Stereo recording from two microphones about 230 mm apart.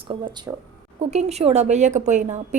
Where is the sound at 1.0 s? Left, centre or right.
Right.